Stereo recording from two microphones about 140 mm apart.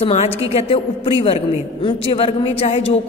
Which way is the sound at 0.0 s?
50° left (ahead or behind).